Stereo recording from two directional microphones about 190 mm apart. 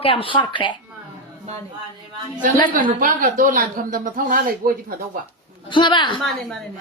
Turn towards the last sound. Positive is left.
turn(degrees=25)  # may be behind; listen again after turning